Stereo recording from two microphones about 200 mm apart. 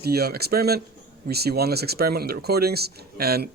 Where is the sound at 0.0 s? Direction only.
50° right (ahead or behind).